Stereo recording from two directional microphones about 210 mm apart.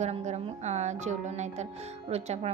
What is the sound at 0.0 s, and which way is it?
Speech, 35° right (ahead or behind).